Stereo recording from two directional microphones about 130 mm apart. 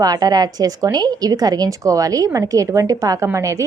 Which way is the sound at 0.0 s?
30° right (ahead or behind).